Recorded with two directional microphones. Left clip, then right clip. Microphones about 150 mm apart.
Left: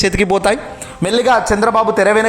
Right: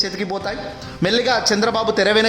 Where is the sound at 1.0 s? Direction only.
5° left (ahead or behind).